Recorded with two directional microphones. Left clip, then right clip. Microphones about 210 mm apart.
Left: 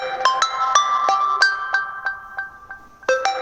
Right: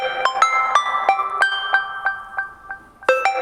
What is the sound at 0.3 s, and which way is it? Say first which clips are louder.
Music: right 5 dB; 10° right (ahead or behind).